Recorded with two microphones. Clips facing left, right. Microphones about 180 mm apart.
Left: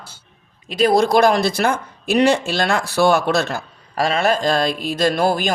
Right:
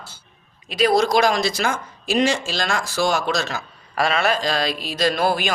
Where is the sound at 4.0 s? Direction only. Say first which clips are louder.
Left 2 dB; 45° left (ahead or behind).